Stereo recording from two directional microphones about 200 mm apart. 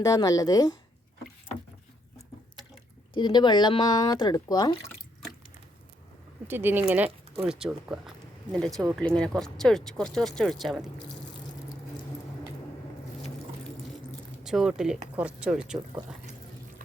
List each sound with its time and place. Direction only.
0.0 s a woman's voice: 15° left (ahead or behind)
3.2 s speech: 20° left (ahead or behind)
6.5 s speech: 10° right (ahead or behind)
8.7 s speech: 15° right (ahead or behind)
9.0 s speech: 5° left (ahead or behind)
14.4 s speech: 5° right (ahead or behind)